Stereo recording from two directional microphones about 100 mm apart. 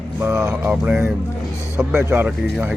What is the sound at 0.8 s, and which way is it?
Speech, 5° right (ahead or behind).